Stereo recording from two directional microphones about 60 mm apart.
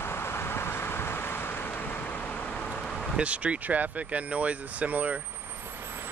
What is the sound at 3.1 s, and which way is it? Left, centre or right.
Speech, right.